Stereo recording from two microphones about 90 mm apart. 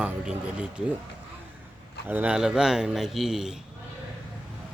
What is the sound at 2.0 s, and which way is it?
Speech, 20° right (ahead or behind).